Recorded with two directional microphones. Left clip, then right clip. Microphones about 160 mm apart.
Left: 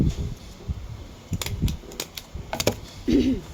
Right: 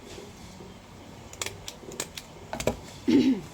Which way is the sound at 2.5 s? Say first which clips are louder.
Left 5 dB; 50° left (ahead or behind).